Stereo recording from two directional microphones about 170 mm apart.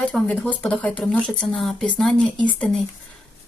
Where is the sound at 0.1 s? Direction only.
5° left (ahead or behind).